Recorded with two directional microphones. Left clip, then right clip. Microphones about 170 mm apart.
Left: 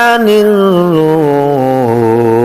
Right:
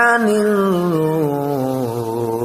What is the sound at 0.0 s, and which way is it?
Music, 25° left (ahead or behind).